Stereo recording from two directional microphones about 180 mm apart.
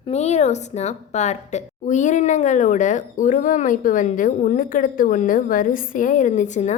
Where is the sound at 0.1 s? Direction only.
40° left (ahead or behind).